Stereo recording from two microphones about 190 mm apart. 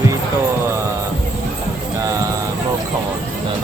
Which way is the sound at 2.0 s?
20° right (ahead or behind).